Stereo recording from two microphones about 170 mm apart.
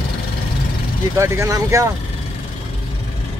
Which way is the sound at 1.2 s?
15° right (ahead or behind).